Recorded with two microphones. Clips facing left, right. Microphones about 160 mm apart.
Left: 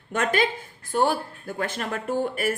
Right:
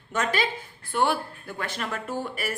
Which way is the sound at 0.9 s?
40° left (ahead or behind).